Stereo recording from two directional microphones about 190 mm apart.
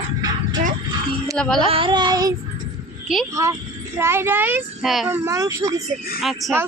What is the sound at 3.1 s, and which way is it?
Speech, centre (ahead or behind).